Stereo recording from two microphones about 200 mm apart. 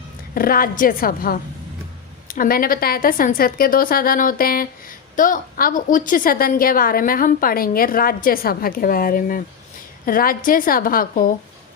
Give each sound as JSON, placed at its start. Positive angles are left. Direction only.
{"t": 0.3, "sound": "a woman's voice", "side_deg": 45}